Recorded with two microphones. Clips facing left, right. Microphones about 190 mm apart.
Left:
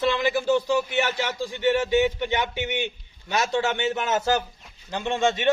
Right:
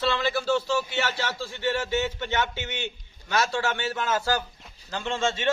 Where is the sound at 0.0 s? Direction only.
15° left (ahead or behind).